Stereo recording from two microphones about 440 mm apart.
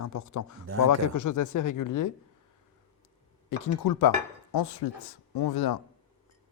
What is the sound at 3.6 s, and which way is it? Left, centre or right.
Speech, left.